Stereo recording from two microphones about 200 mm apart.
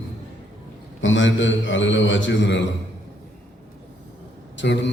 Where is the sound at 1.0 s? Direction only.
70° left (ahead or behind).